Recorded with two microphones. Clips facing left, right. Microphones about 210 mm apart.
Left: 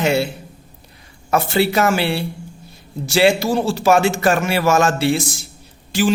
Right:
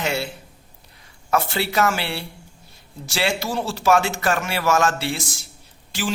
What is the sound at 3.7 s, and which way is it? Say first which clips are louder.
Speech: left 2 dB; 5° left (ahead or behind).